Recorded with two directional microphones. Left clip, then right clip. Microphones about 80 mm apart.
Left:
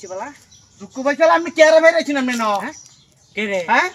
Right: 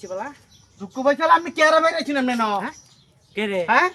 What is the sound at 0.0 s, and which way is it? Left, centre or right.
Speech, right.